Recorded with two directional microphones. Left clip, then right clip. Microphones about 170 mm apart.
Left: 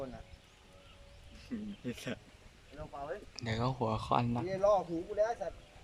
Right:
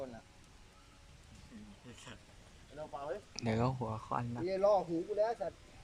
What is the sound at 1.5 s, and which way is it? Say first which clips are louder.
Speech: left 13 dB; 75° left (ahead or behind).